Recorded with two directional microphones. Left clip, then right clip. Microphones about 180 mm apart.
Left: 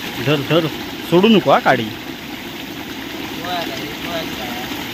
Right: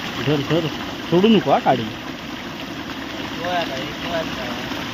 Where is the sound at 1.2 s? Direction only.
10° left (ahead or behind).